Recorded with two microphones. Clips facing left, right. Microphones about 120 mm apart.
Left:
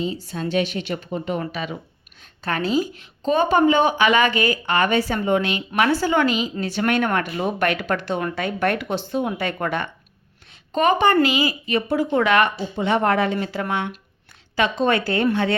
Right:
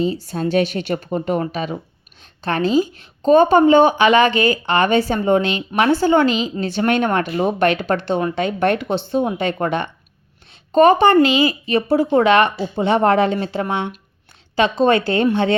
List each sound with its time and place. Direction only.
0.3 s a woman's voice: 40° right (ahead or behind); by 9.9 s 25° right (ahead or behind)
10.7 s a woman's voice: 35° right (ahead or behind)